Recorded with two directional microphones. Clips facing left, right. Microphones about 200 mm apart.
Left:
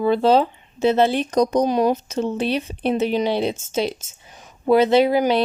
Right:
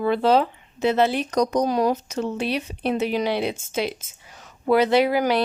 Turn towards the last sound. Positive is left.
turn(degrees=20)  # may be behind; listen again after turning